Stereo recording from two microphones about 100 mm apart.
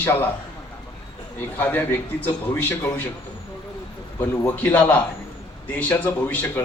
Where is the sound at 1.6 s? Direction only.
20° left (ahead or behind).